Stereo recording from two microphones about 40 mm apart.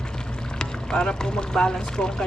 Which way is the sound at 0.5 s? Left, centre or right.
Left.